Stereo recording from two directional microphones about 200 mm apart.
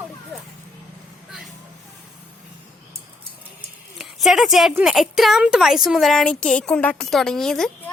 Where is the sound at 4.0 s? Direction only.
Centre (ahead or behind).